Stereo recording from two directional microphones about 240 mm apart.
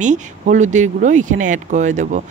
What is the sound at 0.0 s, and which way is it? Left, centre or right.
Speech, right.